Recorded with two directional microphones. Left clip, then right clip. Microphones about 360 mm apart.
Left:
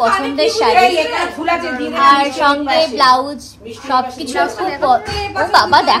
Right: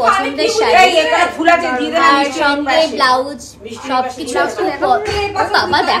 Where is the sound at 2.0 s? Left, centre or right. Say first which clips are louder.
Left 1 dB; centre.